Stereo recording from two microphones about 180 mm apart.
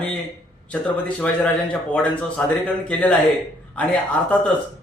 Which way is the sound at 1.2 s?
5° left (ahead or behind).